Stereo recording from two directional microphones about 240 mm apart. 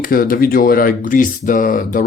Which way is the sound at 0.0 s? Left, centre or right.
Left.